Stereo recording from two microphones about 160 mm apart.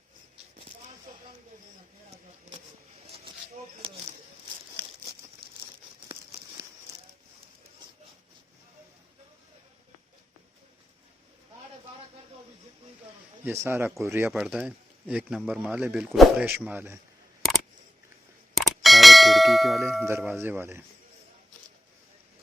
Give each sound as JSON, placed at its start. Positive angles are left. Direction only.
{"t": 13.4, "sound": "speech", "side_deg": -15}
{"t": 14.3, "sound": "speech", "side_deg": -5}
{"t": 18.5, "sound": "clang", "side_deg": 0}
{"t": 20.1, "sound": "speech", "side_deg": -5}